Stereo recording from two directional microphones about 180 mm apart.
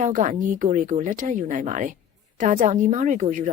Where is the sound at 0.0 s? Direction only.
45° right (ahead or behind).